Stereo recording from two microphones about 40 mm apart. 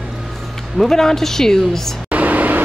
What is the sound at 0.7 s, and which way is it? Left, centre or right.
A woman's voice, centre.